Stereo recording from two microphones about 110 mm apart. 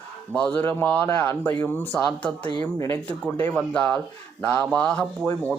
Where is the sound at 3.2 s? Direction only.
10° left (ahead or behind).